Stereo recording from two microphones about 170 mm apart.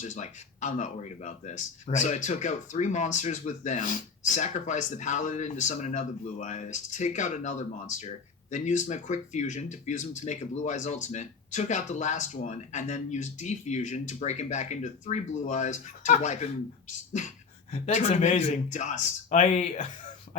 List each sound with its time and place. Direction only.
0.0 s speech: 45° left (ahead or behind)